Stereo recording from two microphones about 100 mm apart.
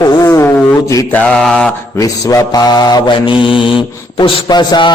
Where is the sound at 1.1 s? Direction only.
5° left (ahead or behind).